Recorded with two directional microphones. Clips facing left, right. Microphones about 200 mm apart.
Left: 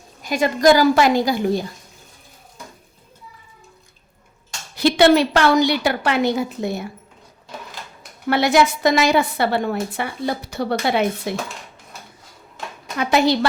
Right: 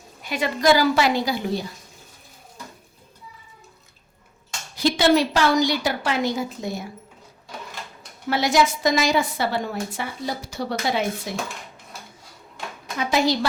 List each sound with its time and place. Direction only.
0.2 s a woman's voice: 40° left (ahead or behind)
4.8 s a woman's voice: 65° left (ahead or behind)
8.3 s a woman's voice: 60° left (ahead or behind)
13.0 s a woman's voice: 65° left (ahead or behind)